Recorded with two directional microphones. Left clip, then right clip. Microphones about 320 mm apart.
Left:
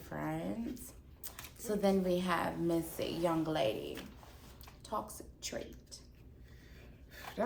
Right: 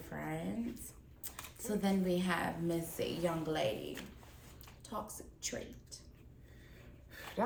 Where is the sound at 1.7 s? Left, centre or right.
Centre.